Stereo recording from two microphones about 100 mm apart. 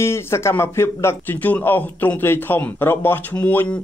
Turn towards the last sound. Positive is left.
turn(degrees=15)  # may be behind; listen again after turning